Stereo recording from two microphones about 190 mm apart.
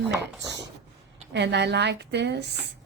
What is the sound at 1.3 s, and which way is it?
A woman's voice, 65° right (ahead or behind).